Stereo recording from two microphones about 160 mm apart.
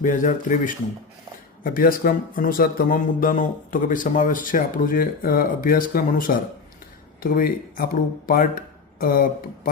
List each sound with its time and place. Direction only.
0.0 s speech: 55° left (ahead or behind)